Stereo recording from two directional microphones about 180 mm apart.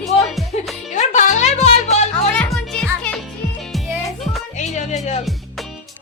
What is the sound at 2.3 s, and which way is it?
Music, 5° left (ahead or behind).